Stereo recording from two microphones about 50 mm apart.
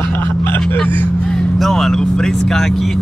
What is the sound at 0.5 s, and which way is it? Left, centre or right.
Vehicle, left.